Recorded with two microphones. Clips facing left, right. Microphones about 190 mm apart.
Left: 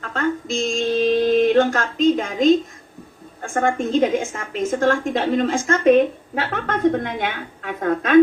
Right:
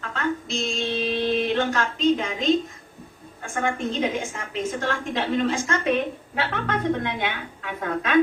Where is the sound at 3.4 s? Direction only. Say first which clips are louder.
Left 5 dB; 45° left (ahead or behind).